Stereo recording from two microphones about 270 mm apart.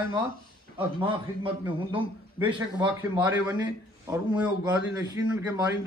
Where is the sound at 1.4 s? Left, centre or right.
Centre.